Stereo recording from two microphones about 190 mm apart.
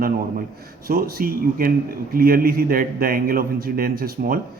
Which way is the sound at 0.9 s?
50° right (ahead or behind).